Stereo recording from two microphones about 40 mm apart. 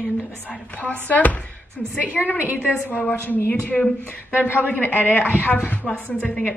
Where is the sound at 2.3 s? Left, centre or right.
Right.